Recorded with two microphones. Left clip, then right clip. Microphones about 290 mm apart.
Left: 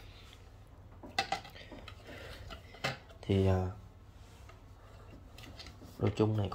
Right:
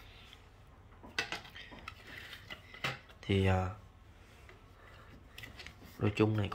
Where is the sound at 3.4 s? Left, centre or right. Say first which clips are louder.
Even; right.